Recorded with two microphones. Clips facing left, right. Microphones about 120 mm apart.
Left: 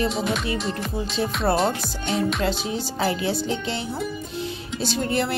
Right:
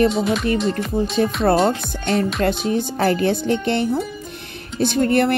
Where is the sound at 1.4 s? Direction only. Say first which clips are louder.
Right 3 dB; 50° right (ahead or behind).